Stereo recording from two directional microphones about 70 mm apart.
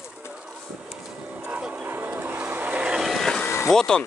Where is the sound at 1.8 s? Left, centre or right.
Right.